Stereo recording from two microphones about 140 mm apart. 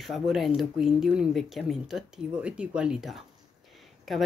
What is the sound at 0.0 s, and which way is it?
Speech, centre (ahead or behind).